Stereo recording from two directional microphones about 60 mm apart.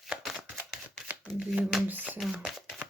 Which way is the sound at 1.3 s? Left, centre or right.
Right.